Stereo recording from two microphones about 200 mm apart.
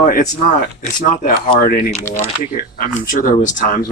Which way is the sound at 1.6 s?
45° left (ahead or behind).